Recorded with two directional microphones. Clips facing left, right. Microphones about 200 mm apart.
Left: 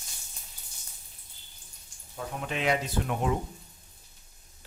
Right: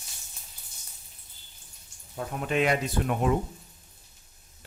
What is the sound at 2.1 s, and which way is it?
Speech, 50° right (ahead or behind).